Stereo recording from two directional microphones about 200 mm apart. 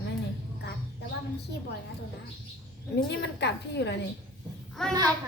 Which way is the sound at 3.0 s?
60° left (ahead or behind).